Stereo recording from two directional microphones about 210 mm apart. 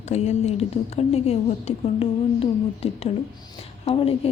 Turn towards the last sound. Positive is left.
turn(degrees=25)  # may be behind; listen again after turning